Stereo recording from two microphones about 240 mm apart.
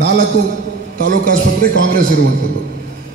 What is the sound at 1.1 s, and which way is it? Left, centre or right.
Speech, right.